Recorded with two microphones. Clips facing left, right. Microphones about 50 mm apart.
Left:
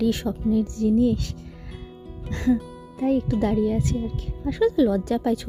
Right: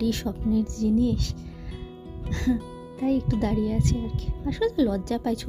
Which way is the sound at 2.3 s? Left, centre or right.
Centre.